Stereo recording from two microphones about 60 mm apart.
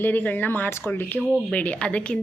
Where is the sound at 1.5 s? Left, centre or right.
Left.